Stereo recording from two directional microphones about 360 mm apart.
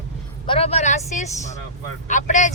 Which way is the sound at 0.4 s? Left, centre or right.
Centre.